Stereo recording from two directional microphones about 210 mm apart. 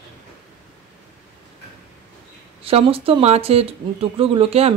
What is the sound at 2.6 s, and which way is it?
Speech, 25° right (ahead or behind).